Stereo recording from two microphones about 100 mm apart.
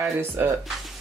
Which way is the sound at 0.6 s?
Centre (ahead or behind).